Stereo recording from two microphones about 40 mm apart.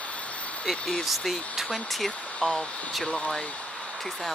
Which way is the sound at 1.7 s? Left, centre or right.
Centre.